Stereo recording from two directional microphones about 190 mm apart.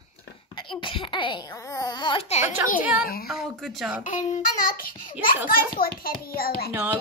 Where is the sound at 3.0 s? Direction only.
50° left (ahead or behind).